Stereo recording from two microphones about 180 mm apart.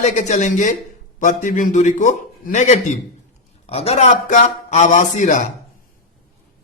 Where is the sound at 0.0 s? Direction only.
40° left (ahead or behind).